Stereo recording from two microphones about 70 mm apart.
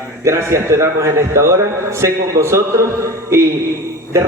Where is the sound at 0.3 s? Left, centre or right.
Right.